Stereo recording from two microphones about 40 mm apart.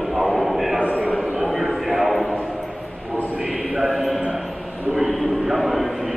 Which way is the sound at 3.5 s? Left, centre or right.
Centre.